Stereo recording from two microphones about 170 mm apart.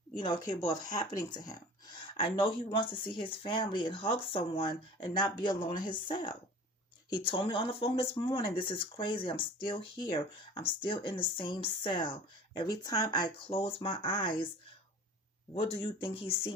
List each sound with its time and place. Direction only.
0.4 s speech: 20° left (ahead or behind)
15.5 s speech: 30° left (ahead or behind)